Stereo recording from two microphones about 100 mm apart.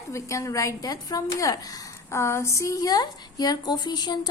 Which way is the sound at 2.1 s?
25° left (ahead or behind).